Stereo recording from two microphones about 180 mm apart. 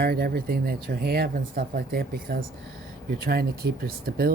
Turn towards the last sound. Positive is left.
turn(degrees=-55)  # may be behind; listen again after turning